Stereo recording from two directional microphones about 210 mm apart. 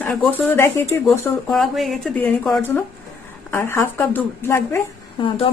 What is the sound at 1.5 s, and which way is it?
A woman's voice, centre (ahead or behind).